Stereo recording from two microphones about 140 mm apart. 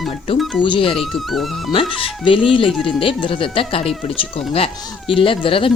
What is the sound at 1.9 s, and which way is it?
Speech, 40° left (ahead or behind).